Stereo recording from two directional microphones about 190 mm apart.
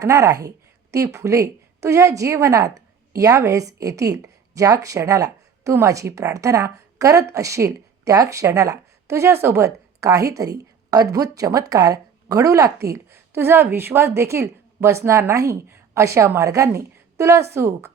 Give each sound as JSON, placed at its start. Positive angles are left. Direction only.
{"t": 0.0, "sound": "a woman's voice", "side_deg": -15}